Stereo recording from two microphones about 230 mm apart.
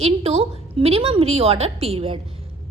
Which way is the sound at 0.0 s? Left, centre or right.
Right.